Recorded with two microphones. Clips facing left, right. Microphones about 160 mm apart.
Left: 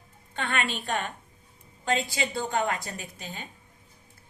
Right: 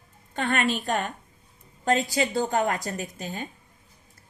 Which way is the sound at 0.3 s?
40° right (ahead or behind).